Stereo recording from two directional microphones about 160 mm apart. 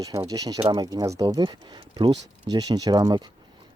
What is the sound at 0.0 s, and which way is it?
Speech, 20° right (ahead or behind).